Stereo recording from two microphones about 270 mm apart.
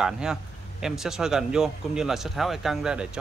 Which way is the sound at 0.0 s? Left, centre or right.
Centre.